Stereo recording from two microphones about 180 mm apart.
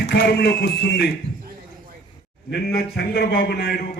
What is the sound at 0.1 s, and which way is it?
A man's voice, 65° left (ahead or behind).